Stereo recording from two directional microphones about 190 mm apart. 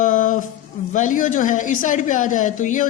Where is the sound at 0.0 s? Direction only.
40° left (ahead or behind).